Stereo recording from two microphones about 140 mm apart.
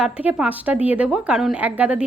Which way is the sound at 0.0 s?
10° right (ahead or behind).